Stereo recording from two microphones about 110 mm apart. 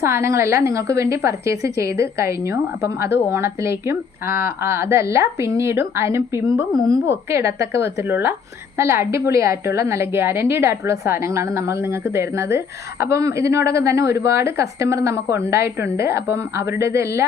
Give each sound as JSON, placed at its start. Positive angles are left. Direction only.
{"t": 0.0, "sound": "a woman's voice", "side_deg": -25}